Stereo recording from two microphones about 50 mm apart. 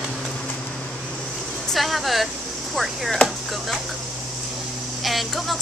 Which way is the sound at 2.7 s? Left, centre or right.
Centre.